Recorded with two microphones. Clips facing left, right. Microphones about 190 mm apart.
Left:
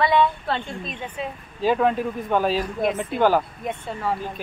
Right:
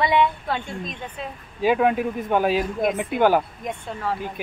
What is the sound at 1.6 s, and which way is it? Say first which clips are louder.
A woman's voice: right 1 dB; 10° right (ahead or behind).